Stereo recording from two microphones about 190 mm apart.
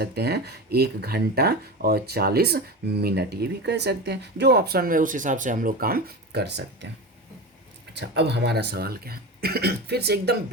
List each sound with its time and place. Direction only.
0.0 s speech: 55° right (ahead or behind)
7.9 s speech: 65° right (ahead or behind)